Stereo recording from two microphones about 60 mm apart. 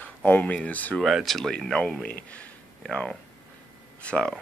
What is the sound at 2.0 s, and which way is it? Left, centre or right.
Speech, left.